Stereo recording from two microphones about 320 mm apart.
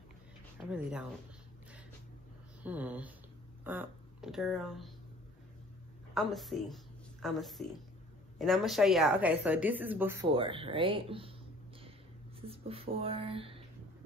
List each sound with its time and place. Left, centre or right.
0.7 s speech: centre
2.6 s speech: centre
6.1 s speech: centre
12.4 s speech: centre